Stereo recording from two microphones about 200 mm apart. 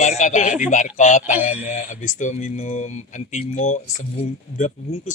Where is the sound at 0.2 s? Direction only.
35° left (ahead or behind).